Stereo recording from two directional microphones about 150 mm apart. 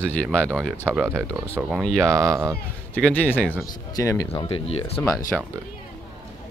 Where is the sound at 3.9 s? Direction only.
20° left (ahead or behind).